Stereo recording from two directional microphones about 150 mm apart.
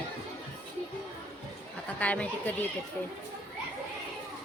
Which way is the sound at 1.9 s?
10° left (ahead or behind).